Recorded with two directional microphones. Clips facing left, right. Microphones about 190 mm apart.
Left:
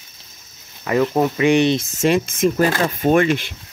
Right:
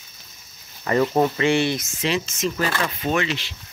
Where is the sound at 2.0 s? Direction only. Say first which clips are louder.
Left 8 dB; 50° left (ahead or behind).